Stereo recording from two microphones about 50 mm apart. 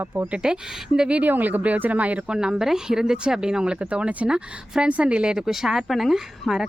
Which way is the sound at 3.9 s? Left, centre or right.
Right.